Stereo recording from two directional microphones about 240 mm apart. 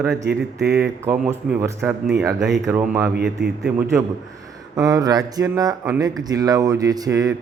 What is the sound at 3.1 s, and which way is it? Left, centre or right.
Speech, right.